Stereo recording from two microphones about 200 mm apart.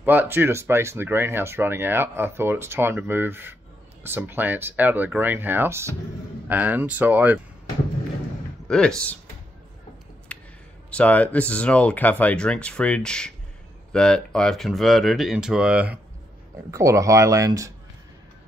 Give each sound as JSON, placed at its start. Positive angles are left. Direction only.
{"t": 0.0, "sound": "speech", "side_deg": -10}
{"t": 8.6, "sound": "speech", "side_deg": 5}
{"t": 10.3, "sound": "a sound", "side_deg": 5}
{"t": 10.9, "sound": "speech", "side_deg": 5}